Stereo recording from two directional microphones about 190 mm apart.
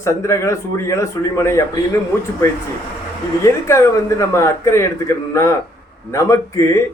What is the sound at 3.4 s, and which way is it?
A man's voice, 15° left (ahead or behind).